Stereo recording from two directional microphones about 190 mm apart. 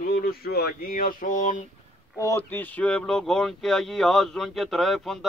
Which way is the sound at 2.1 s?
15° left (ahead or behind).